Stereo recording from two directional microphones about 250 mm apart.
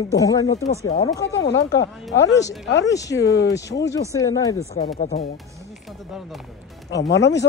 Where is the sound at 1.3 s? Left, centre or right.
Left.